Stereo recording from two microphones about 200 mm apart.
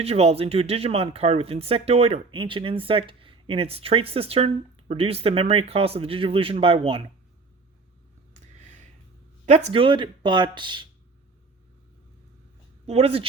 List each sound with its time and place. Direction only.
0.0 s speech: 30° right (ahead or behind)
9.5 s speech: 35° right (ahead or behind)
12.8 s speech: 30° right (ahead or behind)